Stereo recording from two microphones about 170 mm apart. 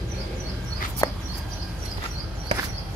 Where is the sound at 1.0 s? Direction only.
20° left (ahead or behind).